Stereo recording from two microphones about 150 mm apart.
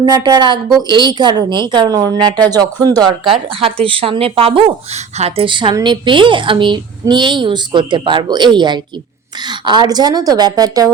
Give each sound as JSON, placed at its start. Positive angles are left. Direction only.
{"t": 0.0, "sound": "a woman's voice", "side_deg": -30}